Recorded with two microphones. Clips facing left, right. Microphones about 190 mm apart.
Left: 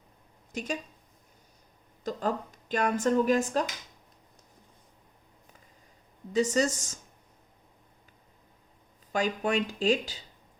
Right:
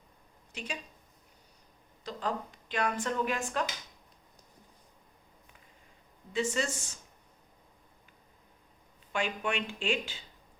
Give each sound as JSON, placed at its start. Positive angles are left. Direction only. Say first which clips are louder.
{"t": 0.5, "sound": "speech", "louder": "left 7 dB", "side_deg": 45}
{"t": 2.0, "sound": "speech", "louder": "left 5 dB", "side_deg": 45}
{"t": 6.3, "sound": "speech", "louder": "left 6 dB", "side_deg": 40}
{"t": 9.1, "sound": "speech", "louder": "left 5 dB", "side_deg": 40}